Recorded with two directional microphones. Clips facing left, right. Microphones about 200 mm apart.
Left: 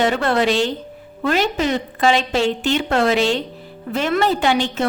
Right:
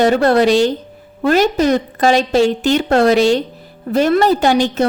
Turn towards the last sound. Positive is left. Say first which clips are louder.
# right 5 dB
turn(degrees=-40)  # may be behind; listen again after turning